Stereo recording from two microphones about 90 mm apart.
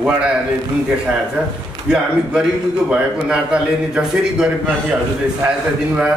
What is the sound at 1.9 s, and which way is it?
A man's voice, 10° right (ahead or behind).